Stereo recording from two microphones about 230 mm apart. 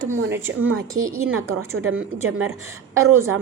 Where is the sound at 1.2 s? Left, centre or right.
Right.